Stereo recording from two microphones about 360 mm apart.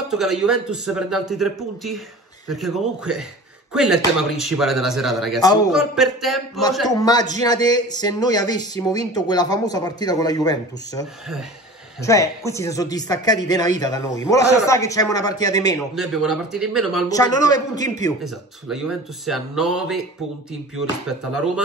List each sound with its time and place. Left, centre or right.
0.1 s a man's voice: centre
5.4 s speech: centre
5.7 s a man's voice: centre
15.9 s a man's voice: centre
17.1 s speech: centre
18.7 s a man's voice: centre